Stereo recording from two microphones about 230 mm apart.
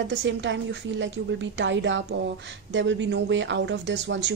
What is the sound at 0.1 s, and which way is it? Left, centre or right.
A woman's voice, right.